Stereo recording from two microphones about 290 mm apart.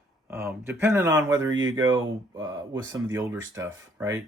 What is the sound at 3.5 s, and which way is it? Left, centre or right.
Speech, centre.